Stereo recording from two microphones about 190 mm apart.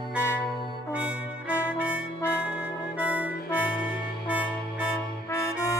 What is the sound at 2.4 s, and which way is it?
Music, 5° right (ahead or behind).